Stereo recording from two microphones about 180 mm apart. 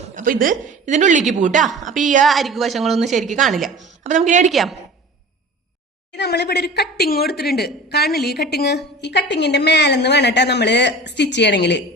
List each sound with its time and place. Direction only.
0.2 s a woman's voice: 50° right (ahead or behind)
1.6 s speech: centre (ahead or behind)
2.0 s a woman's voice: 45° right (ahead or behind)
2.2 s speech: centre (ahead or behind)
3.2 s a woman's voice: 40° right (ahead or behind)
3.4 s speech: centre (ahead or behind)
4.0 s a woman's voice: 40° right (ahead or behind)
4.5 s speech: centre (ahead or behind)
6.1 s a woman's voice: 70° left (ahead or behind)